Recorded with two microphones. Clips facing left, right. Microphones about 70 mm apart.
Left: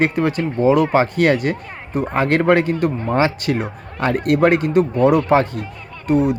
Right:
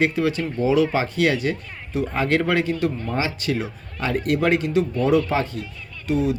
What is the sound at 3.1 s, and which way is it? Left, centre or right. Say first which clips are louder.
Speech: left 6 dB; left.